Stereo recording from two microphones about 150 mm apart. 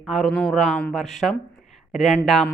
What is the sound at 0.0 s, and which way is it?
A man's voice, centre (ahead or behind).